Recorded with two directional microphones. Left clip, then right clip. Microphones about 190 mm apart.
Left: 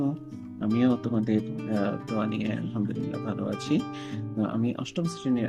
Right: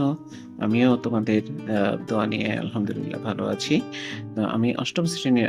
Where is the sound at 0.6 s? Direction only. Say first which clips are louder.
Right 5 dB; 20° right (ahead or behind).